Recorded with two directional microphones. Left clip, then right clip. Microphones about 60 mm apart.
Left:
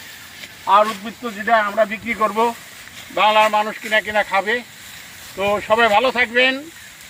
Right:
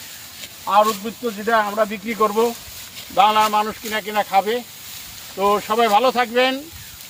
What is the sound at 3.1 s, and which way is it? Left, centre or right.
Speech, right.